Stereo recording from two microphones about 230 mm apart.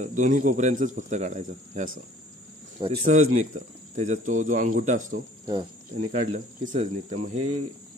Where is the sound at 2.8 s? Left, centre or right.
Centre.